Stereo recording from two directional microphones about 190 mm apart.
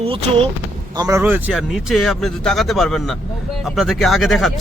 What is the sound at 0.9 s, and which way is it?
Speech, 15° right (ahead or behind).